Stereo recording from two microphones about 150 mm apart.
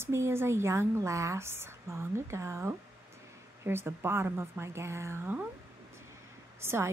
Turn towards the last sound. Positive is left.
turn(degrees=-15)  # may be behind; listen again after turning